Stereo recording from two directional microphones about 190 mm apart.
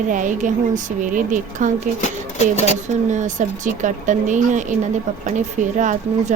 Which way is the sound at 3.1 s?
40° right (ahead or behind).